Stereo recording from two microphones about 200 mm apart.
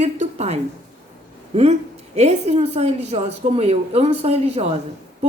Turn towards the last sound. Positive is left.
turn(degrees=-30)  # may be behind; listen again after turning